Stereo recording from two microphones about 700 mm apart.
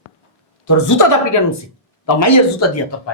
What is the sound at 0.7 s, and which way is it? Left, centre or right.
A woman's voice, left.